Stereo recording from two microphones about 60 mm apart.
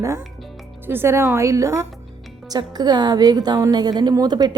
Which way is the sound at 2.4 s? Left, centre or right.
Right.